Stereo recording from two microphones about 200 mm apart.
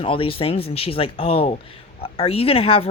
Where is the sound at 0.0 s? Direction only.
25° left (ahead or behind).